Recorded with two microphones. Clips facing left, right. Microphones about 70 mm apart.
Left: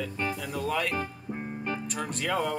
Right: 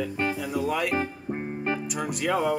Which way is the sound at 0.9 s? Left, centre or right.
Right.